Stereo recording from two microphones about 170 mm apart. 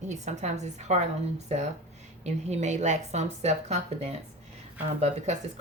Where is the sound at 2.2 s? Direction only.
40° right (ahead or behind).